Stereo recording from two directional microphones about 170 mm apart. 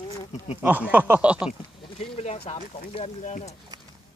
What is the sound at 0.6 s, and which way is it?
Speech, 10° right (ahead or behind).